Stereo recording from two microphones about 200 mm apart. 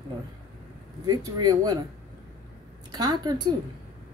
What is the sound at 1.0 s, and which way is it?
Speech, 20° right (ahead or behind).